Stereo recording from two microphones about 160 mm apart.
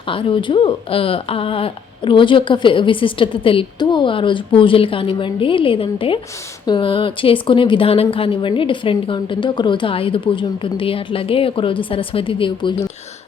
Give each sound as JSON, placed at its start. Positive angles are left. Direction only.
{"t": 0.1, "sound": "speech", "side_deg": 35}